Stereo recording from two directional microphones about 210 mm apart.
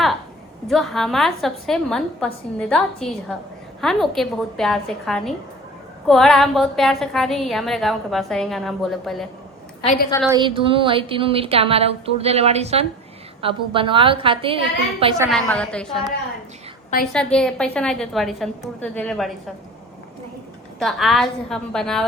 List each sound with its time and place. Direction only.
0.7 s a woman's voice: centre (ahead or behind)
10.2 s a woman's voice: 20° right (ahead or behind)
15.3 s a woman's voice: 5° left (ahead or behind)
20.7 s a woman's voice: centre (ahead or behind)